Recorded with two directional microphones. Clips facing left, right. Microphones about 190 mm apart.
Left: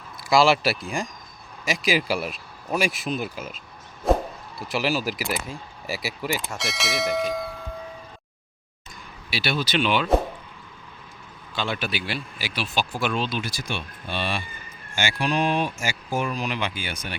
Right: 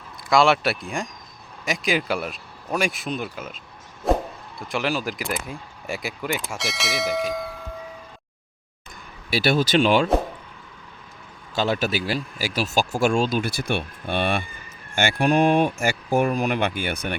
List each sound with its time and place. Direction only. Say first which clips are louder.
0.3 s a man's voice: even; centre (ahead or behind)
9.3 s speech: right 6 dB; 50° right (ahead or behind)
11.5 s speech: right 6 dB; 40° right (ahead or behind); by 17.2 s 55° right (ahead or behind)